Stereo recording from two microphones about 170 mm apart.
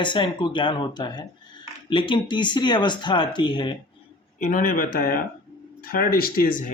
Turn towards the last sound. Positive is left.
turn(degrees=60)  # may be behind; listen again after turning